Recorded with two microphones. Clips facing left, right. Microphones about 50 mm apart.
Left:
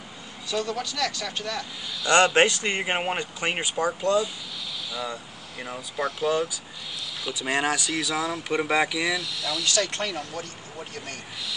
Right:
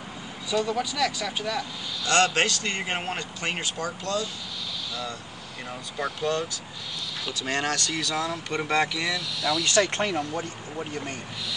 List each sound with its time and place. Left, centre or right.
0.5 s speech: centre
2.0 s speech: centre
5.7 s speech: centre
9.7 s speech: right